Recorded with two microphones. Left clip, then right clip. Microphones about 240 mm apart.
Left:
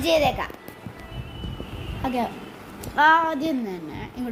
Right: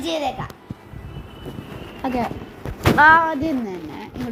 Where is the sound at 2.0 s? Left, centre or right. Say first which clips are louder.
Right 2 dB; centre.